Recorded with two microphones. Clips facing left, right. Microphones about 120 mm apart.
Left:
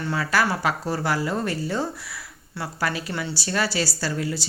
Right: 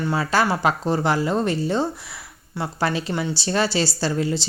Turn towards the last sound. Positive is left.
turn(degrees=-25)  # may be behind; listen again after turning